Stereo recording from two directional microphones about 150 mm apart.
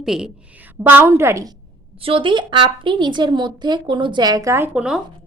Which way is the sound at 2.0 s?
35° right (ahead or behind).